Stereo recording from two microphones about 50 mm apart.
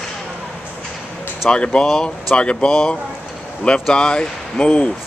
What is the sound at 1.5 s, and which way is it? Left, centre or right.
Speech, centre.